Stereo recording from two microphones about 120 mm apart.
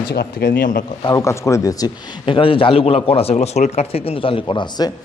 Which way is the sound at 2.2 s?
45° left (ahead or behind).